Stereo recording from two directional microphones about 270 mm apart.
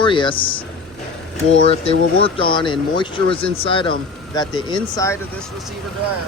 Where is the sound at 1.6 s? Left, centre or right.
Left.